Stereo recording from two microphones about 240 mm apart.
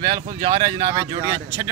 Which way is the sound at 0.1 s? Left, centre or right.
Right.